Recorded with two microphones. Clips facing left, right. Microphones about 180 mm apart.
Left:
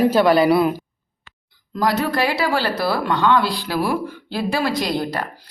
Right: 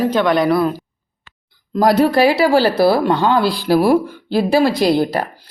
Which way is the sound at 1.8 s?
35° right (ahead or behind).